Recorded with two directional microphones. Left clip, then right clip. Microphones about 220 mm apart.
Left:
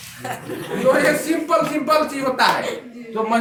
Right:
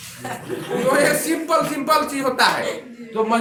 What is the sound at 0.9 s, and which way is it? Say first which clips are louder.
Speech: left 1 dB; 20° right (ahead or behind).